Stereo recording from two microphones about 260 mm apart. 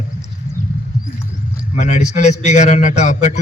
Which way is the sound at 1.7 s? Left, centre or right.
Left.